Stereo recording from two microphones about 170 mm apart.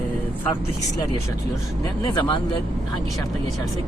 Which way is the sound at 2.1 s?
30° left (ahead or behind).